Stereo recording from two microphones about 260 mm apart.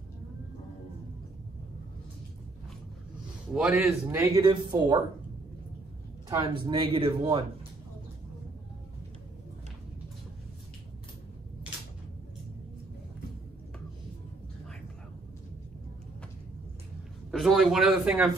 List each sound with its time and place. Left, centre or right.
3.5 s speech: centre
6.2 s speech: centre
17.3 s speech: centre